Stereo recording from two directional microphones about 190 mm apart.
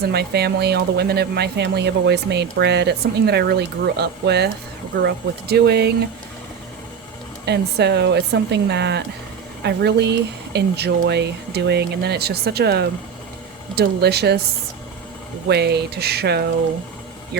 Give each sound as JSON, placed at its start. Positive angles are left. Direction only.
{"t": 0.0, "sound": "speech", "side_deg": -60}
{"t": 7.4, "sound": "speech", "side_deg": -60}
{"t": 15.4, "sound": "speech", "side_deg": -60}